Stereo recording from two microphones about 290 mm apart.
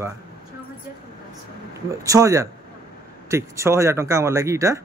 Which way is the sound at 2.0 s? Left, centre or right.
Centre.